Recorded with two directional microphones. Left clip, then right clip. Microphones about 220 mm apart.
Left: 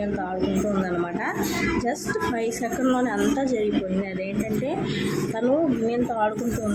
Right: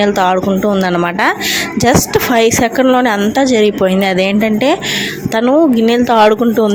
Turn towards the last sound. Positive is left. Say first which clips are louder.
# right 15 dB
turn(degrees=-45)  # may be behind; listen again after turning